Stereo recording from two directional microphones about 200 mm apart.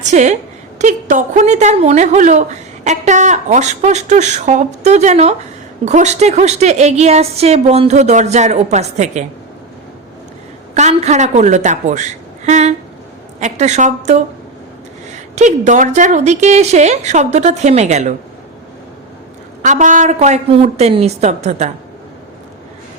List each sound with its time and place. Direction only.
0.0 s a woman's voice: 35° right (ahead or behind)
10.8 s a woman's voice: 35° right (ahead or behind)
19.6 s a woman's voice: 40° right (ahead or behind)